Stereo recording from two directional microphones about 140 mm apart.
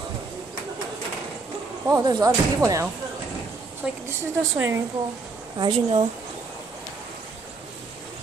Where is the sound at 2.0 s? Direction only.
30° right (ahead or behind).